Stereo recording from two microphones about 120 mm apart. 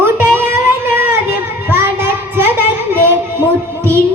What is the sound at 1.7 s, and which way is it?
Child singing, 20° right (ahead or behind).